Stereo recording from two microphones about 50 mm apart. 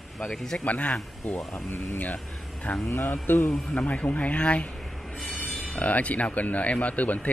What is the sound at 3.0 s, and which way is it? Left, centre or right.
Speech, left.